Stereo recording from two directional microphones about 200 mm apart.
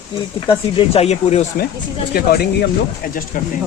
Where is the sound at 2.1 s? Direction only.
50° left (ahead or behind).